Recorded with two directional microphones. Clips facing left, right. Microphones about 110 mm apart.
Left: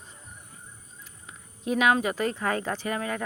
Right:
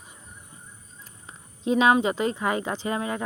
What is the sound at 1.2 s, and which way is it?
Speech, 25° right (ahead or behind).